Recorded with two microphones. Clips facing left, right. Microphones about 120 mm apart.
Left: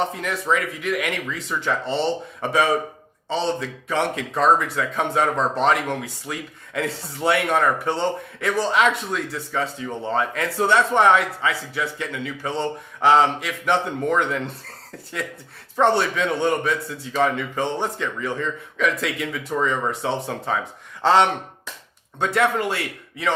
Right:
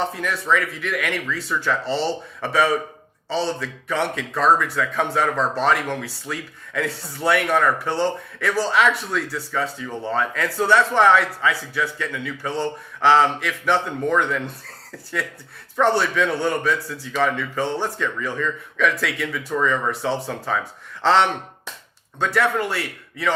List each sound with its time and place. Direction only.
0.2 s a man's voice: 20° left (ahead or behind)
15.7 s a man's voice: 25° left (ahead or behind)
17.1 s speech: 35° left (ahead or behind)
17.3 s a man's voice: 20° left (ahead or behind)